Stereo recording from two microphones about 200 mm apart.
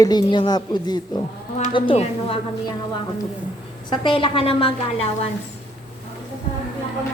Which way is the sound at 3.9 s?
25° left (ahead or behind).